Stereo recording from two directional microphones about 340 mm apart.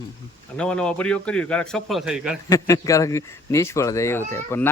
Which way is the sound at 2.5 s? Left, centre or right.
Centre.